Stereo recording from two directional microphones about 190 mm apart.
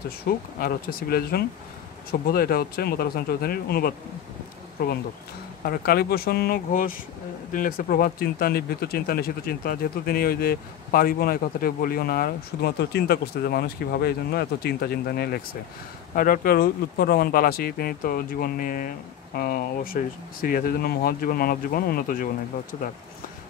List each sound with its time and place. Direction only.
0.2 s speech: 50° left (ahead or behind)